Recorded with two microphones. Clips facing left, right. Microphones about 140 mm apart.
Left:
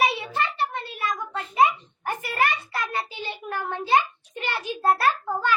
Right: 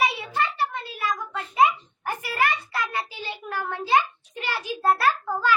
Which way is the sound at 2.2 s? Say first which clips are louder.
Even; 25° left (ahead or behind).